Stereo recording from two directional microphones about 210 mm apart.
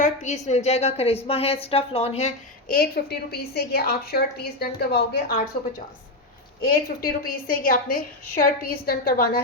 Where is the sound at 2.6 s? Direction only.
45° left (ahead or behind).